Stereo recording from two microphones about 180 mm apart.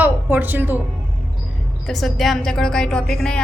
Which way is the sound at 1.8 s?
Centre (ahead or behind).